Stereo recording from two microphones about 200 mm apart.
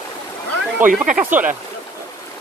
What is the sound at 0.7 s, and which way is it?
Speech, 10° right (ahead or behind).